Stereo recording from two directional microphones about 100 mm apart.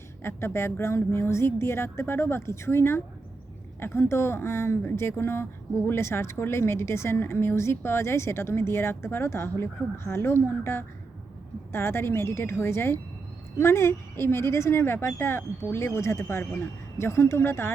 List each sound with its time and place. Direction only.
0.2 s speech: 25° left (ahead or behind)